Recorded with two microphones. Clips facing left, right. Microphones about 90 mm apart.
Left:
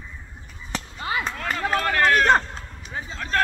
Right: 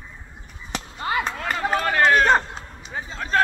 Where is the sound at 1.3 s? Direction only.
10° right (ahead or behind).